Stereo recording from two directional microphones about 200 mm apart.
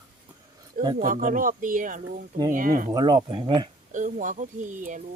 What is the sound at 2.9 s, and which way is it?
Speech, 20° right (ahead or behind).